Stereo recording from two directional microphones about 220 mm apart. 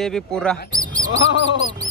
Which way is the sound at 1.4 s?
60° left (ahead or behind).